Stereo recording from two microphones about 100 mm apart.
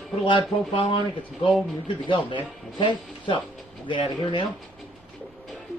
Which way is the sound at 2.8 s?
55° left (ahead or behind).